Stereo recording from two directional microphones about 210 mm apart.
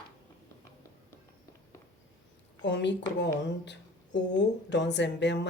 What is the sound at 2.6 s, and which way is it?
Speech, 55° left (ahead or behind).